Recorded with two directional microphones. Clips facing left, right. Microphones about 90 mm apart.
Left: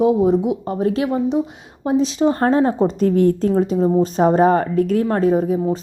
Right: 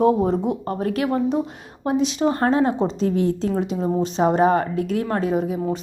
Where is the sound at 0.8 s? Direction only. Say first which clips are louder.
Left 5 dB; 25° left (ahead or behind).